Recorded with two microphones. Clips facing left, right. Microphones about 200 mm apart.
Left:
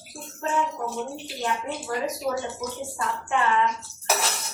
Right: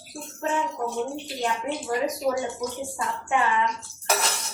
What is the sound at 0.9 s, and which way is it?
Speech, centre (ahead or behind).